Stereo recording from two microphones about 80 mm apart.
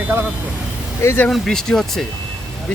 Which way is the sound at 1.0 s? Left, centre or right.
Left.